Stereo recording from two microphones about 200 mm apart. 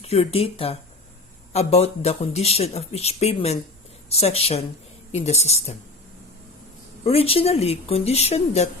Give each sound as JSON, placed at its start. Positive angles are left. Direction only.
{"t": 0.0, "sound": "speech", "side_deg": 30}
{"t": 7.0, "sound": "speech", "side_deg": 30}